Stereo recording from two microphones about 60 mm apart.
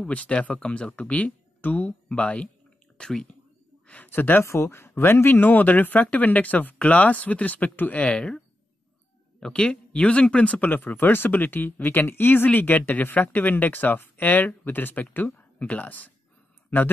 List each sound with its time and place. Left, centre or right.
0.1 s speech: left
3.8 s a sound: left
4.1 s speech: left; by 8.4 s centre
9.4 s speech: centre; by 16.9 s left